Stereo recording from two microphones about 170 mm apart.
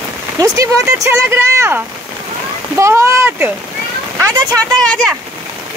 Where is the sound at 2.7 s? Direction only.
15° right (ahead or behind).